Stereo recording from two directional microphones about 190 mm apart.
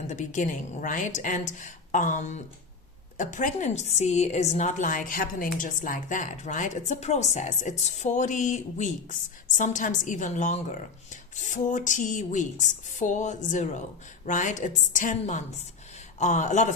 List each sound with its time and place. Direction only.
0.1 s a woman's voice: 40° left (ahead or behind)